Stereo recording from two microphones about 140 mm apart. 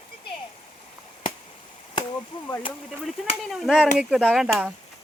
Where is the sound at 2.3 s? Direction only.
35° left (ahead or behind).